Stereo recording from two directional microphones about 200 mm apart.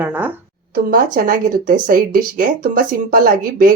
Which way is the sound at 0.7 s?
45° right (ahead or behind).